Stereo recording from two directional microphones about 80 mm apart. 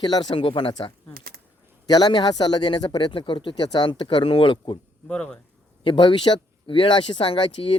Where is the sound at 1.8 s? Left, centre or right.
Left.